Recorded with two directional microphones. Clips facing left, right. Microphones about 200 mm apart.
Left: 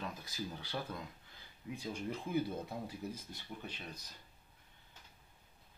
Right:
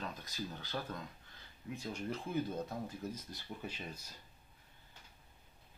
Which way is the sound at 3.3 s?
5° right (ahead or behind).